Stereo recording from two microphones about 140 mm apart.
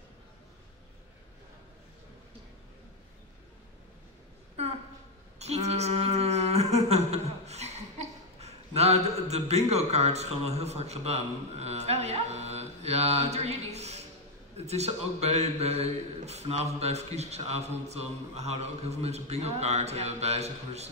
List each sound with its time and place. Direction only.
5.4 s humming: 50° right (ahead or behind)
8.4 s a man's voice: 50° right (ahead or behind)